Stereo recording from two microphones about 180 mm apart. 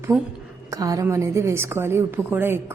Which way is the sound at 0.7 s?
20° right (ahead or behind).